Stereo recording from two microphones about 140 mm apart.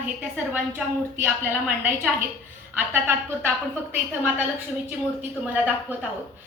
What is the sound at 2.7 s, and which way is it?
A woman's voice, 15° right (ahead or behind).